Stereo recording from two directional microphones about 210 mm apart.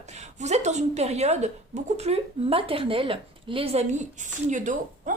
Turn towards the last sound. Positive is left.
turn(degrees=-35)  # may be behind; listen again after turning